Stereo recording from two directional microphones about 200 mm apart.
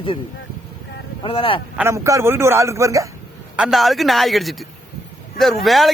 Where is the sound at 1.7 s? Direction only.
15° right (ahead or behind).